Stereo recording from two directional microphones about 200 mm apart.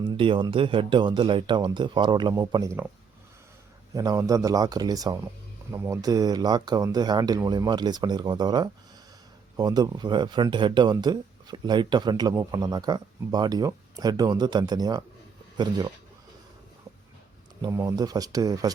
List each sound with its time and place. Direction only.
0.0 s speech: 25° right (ahead or behind)
3.9 s a man's voice: 15° right (ahead or behind)
17.6 s speech: 15° right (ahead or behind)